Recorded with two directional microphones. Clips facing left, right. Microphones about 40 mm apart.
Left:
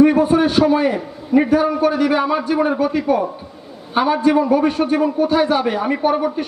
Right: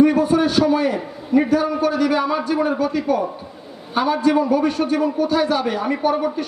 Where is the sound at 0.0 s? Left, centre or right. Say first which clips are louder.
Left 2 dB; left.